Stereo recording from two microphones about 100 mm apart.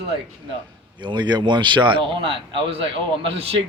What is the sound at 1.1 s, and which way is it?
Speech, 50° right (ahead or behind).